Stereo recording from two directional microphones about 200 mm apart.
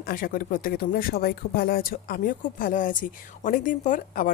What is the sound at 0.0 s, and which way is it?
Speech, 45° left (ahead or behind).